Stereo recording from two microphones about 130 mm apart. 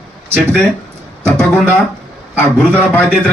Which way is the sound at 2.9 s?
10° left (ahead or behind).